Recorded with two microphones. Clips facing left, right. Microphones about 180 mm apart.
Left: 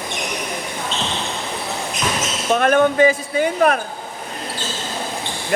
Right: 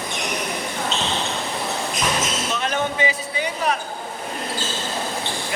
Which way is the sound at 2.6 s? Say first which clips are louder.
Left 11 dB; 55° left (ahead or behind).